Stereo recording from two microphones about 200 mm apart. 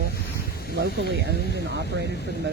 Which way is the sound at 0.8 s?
55° right (ahead or behind).